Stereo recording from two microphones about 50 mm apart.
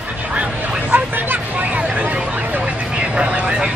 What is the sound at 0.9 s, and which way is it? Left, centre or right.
Vehicle, right.